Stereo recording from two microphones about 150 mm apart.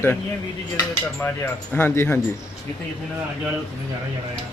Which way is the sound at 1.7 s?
15° left (ahead or behind).